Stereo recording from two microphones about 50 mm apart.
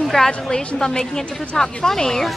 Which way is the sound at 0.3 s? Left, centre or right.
Centre.